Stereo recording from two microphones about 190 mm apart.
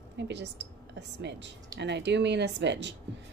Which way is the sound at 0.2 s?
65° right (ahead or behind).